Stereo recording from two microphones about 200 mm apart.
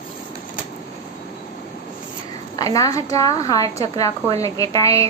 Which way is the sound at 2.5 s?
15° left (ahead or behind).